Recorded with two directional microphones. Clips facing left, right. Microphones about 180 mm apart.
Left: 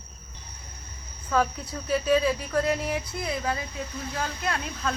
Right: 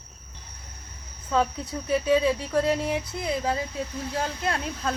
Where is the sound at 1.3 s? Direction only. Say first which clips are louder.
Right 1 dB; 25° right (ahead or behind).